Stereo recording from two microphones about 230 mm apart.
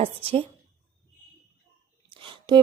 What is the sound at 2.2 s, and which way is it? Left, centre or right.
Whispering, right.